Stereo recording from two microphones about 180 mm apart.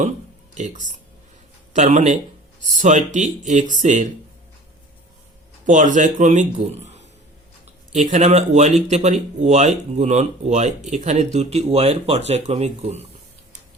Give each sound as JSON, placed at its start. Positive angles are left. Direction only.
{"t": 0.5, "sound": "speech", "side_deg": -40}
{"t": 5.6, "sound": "speech", "side_deg": -45}